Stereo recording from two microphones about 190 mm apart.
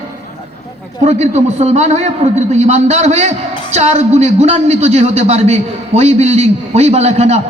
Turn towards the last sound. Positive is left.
turn(degrees=-35)  # may be behind; listen again after turning